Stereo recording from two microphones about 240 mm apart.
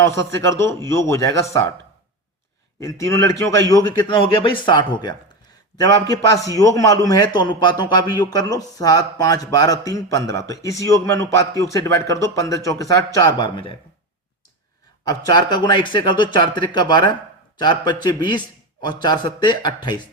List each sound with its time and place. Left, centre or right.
0.2 s a man's voice: centre
2.8 s a man's voice: centre
15.3 s a man's voice: centre